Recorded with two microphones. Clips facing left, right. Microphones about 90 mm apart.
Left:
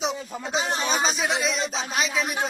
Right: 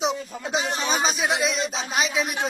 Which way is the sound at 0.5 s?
35° left (ahead or behind).